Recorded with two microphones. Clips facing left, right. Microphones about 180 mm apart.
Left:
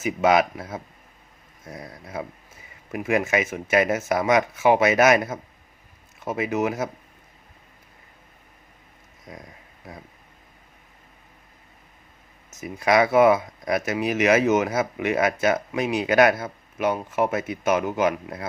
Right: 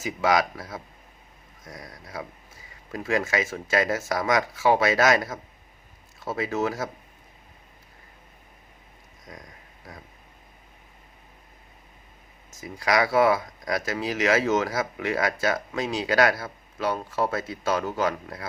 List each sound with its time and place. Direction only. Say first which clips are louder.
0.0 s speech: left 4 dB; 25° left (ahead or behind)
9.2 s a sound: left 3 dB; 25° left (ahead or behind)
12.5 s speech: left 4 dB; 20° left (ahead or behind)